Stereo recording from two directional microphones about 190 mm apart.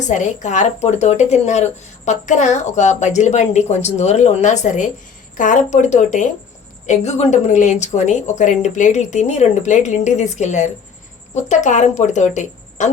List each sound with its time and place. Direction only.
0.0 s a woman's voice: 40° left (ahead or behind)